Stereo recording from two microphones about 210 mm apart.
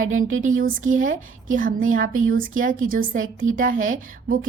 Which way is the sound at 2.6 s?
40° right (ahead or behind).